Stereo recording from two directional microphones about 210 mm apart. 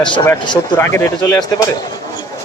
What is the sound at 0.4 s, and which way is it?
Speech, 15° left (ahead or behind).